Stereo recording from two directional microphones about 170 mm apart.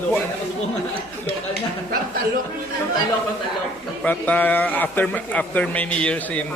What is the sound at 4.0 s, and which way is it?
A man's voice, 10° left (ahead or behind).